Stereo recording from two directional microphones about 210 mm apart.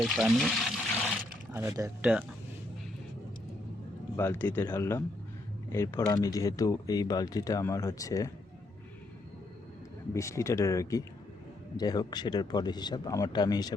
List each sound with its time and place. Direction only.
0.0 s speech: centre (ahead or behind)
1.5 s speech: 15° right (ahead or behind)
4.2 s speech: 10° left (ahead or behind)
10.2 s speech: 15° left (ahead or behind)